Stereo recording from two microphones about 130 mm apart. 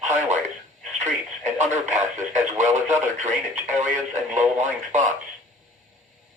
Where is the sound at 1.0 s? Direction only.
65° right (ahead or behind).